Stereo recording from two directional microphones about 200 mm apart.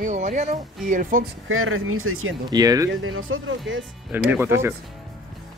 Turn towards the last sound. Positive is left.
turn(degrees=-10)  # may be behind; listen again after turning